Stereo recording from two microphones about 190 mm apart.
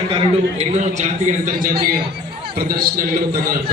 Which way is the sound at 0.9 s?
40° right (ahead or behind).